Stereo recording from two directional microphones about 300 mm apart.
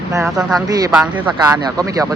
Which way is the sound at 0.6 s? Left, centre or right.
Centre.